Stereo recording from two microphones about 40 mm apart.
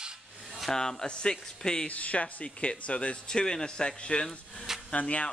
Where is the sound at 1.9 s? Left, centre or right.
Left.